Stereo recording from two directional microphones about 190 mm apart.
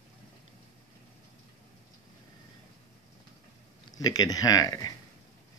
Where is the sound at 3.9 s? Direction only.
20° left (ahead or behind).